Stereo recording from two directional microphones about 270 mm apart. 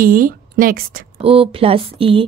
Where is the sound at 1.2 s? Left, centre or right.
Right.